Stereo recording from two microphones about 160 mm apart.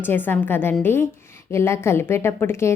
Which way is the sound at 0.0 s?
15° left (ahead or behind).